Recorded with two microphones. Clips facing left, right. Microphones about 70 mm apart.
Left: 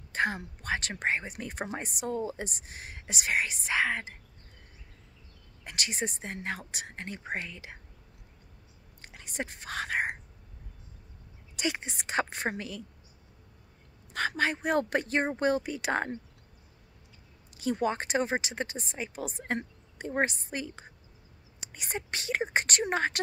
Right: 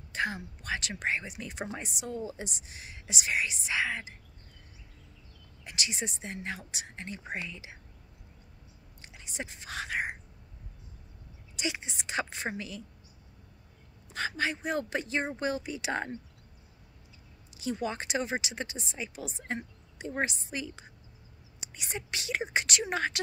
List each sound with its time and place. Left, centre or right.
0.1 s speech: left
5.6 s speech: left
9.0 s a sound: left
11.5 s speech: left
14.1 s speech: left
17.6 s speech: left